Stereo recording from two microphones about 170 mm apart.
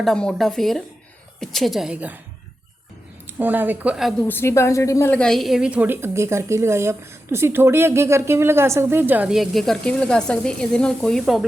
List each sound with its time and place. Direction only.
0.0 s speech: 5° left (ahead or behind)
3.3 s a woman's voice: 10° right (ahead or behind)
4.3 s a woman's voice: 15° left (ahead or behind)
5.1 s a woman's voice: 5° left (ahead or behind)